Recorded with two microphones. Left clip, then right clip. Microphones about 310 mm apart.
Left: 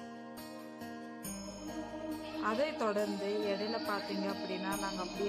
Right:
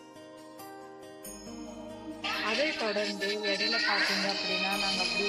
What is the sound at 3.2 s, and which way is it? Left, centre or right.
Speech, right.